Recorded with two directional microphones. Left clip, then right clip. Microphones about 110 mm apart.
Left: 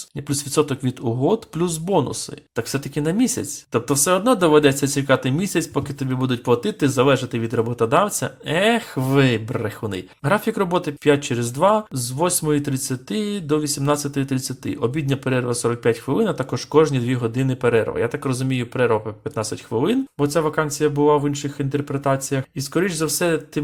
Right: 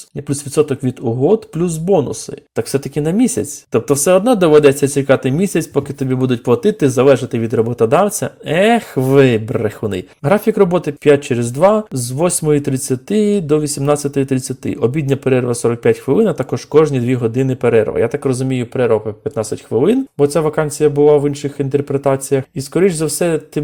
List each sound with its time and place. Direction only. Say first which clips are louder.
0.3 s speech: right 5 dB; 20° right (ahead or behind)
2.6 s speech: right 7 dB; 30° right (ahead or behind)